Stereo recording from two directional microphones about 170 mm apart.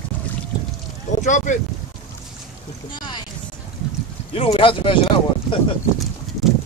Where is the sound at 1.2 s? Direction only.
45° left (ahead or behind).